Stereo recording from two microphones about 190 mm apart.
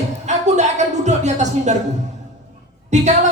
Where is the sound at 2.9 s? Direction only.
40° right (ahead or behind).